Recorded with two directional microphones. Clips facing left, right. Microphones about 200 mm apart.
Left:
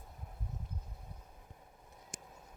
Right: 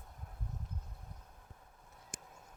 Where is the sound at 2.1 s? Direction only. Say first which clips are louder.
Left 1 dB; 5° left (ahead or behind).